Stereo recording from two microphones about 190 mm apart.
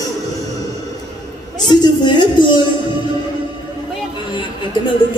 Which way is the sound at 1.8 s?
25° left (ahead or behind).